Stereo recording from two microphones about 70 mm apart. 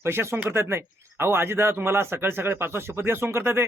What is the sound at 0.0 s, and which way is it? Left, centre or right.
A man's voice, right.